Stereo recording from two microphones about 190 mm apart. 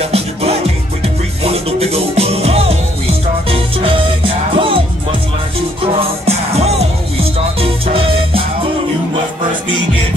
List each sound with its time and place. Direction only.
0.0 s music: 30° right (ahead or behind)
5.9 s music: 35° right (ahead or behind)